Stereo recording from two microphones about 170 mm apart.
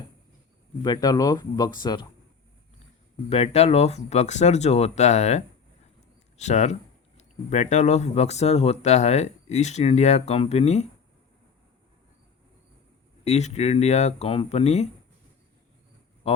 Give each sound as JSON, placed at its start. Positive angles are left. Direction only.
{"t": 0.8, "sound": "speech", "side_deg": 20}
{"t": 3.2, "sound": "speech", "side_deg": 40}
{"t": 13.2, "sound": "speech", "side_deg": 40}